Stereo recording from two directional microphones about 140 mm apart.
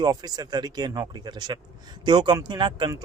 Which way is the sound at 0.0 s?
30° right (ahead or behind).